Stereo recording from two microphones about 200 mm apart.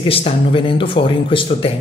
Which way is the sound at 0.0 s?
25° left (ahead or behind).